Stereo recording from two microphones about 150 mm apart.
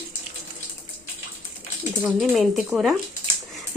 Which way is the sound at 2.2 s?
5° right (ahead or behind).